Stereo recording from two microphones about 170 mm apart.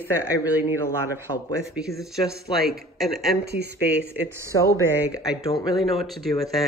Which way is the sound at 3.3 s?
75° right (ahead or behind).